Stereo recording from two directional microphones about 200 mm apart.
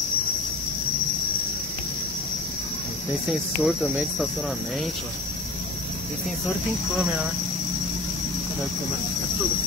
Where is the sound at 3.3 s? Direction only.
5° right (ahead or behind).